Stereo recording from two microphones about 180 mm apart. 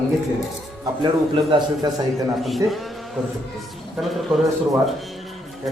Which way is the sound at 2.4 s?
Centre (ahead or behind).